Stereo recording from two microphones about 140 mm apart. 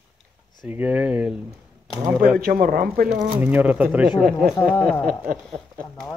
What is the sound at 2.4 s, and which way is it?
Speech, 90° right.